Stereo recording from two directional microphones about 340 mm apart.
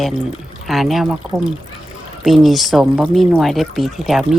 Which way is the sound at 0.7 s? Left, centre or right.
Centre.